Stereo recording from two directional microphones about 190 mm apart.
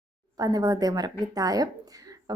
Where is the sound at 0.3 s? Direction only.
20° right (ahead or behind).